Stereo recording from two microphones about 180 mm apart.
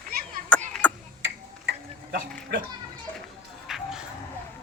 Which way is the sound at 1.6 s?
55° right (ahead or behind).